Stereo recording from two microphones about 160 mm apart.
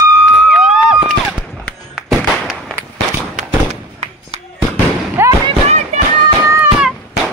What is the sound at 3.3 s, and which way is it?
Fireworks, 45° right (ahead or behind).